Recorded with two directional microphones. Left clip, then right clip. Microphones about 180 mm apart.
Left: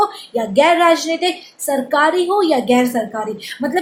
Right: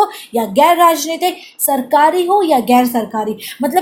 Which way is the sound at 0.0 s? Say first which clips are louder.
Right 2 dB; 45° right (ahead or behind).